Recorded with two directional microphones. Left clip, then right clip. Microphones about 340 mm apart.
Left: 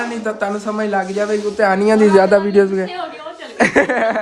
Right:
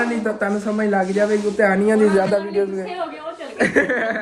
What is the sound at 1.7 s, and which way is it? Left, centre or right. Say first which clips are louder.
Speech: left 6 dB; left.